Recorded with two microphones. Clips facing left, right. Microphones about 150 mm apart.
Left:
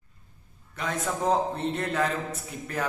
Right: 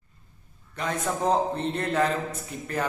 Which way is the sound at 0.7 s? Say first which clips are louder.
Right 2 dB; centre (ahead or behind).